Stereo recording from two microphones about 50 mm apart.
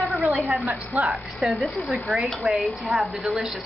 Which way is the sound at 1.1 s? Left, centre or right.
Centre.